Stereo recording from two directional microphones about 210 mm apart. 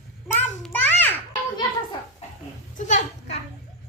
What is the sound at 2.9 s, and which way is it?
Speech, 35° left (ahead or behind).